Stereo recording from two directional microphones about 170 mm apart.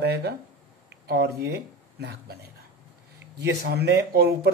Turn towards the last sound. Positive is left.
turn(degrees=-70)  # may be behind; listen again after turning